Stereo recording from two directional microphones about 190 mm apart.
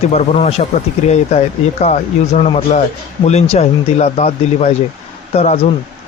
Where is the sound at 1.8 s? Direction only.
35° left (ahead or behind).